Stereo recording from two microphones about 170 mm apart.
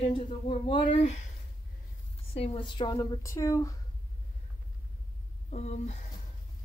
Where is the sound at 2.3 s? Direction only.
35° left (ahead or behind); by 3.7 s 15° left (ahead or behind).